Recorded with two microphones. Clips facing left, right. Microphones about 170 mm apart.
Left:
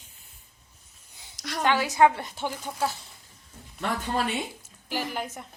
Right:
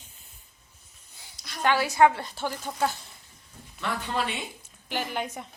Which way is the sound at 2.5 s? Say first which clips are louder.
Right 2 dB; 5° left (ahead or behind).